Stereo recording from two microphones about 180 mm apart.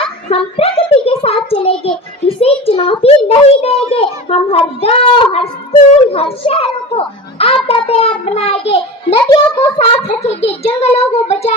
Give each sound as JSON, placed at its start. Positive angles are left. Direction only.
{"t": 0.3, "sound": "a sound", "side_deg": 30}
{"t": 1.8, "sound": "child singing", "side_deg": 35}
{"t": 2.6, "sound": "a child's voice", "side_deg": 30}